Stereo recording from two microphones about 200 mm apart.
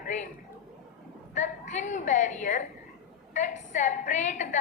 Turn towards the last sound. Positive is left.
turn(degrees=35)  # may be behind; listen again after turning